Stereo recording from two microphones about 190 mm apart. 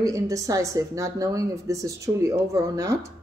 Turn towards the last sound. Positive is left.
turn(degrees=-15)  # may be behind; listen again after turning